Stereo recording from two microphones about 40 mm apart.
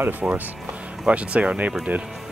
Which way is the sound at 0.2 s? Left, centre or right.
Right.